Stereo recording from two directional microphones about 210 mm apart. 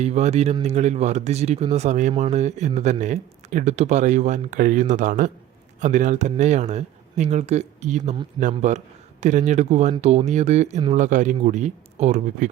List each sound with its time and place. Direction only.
0.0 s speech: 30° right (ahead or behind)